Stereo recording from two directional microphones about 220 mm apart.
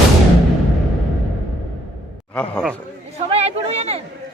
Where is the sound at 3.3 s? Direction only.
30° right (ahead or behind).